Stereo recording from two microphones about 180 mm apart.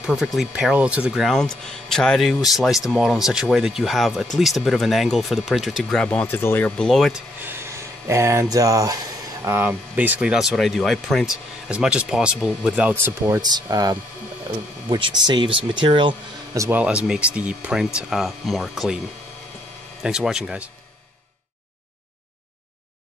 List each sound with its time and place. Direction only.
0.0 s speech: 5° right (ahead or behind)
13.0 s speech: 20° right (ahead or behind)
16.6 s speech: 10° right (ahead or behind)
20.0 s speech: 5° right (ahead or behind)